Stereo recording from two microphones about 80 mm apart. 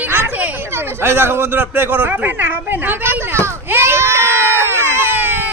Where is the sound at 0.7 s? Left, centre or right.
Right.